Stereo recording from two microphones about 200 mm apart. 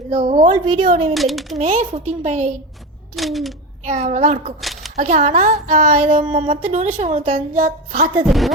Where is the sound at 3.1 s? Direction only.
Centre (ahead or behind).